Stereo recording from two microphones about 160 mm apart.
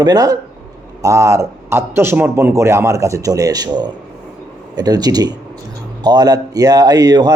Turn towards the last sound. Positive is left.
turn(degrees=-25)  # may be behind; listen again after turning